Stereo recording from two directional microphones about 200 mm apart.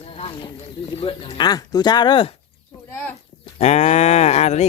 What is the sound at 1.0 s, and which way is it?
Speech, 30° left (ahead or behind).